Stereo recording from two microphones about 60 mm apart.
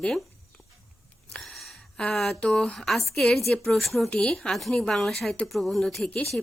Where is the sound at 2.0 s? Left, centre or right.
Centre.